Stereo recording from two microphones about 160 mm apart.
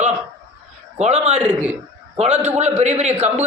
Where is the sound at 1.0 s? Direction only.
45° right (ahead or behind).